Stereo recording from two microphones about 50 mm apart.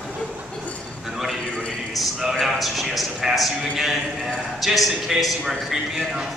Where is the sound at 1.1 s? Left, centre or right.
Centre.